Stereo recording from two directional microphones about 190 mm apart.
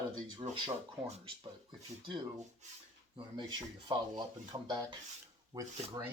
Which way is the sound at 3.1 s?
25° right (ahead or behind).